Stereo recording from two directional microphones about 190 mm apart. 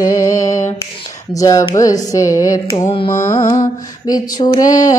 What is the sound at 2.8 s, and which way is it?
Female singing, 30° left (ahead or behind).